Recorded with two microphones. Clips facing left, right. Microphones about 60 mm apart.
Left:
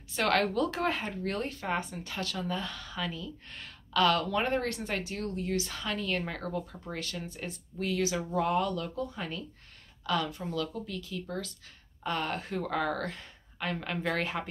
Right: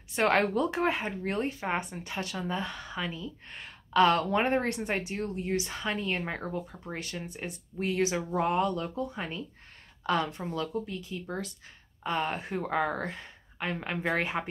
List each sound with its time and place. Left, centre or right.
0.1 s speech: right